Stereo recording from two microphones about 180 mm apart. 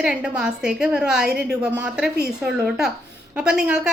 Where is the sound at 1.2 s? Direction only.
60° right (ahead or behind).